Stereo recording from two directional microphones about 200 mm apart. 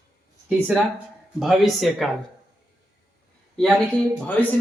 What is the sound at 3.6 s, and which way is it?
Speech, centre (ahead or behind).